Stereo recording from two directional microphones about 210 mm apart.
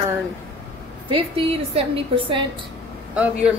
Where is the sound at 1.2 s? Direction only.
25° right (ahead or behind).